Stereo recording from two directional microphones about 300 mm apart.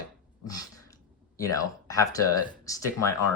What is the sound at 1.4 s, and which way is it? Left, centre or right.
Speech, centre.